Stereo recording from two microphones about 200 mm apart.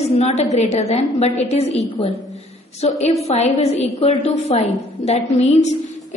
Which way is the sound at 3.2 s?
35° left (ahead or behind).